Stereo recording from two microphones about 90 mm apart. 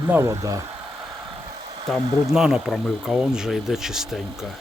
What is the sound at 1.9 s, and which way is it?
Speech, 5° left (ahead or behind).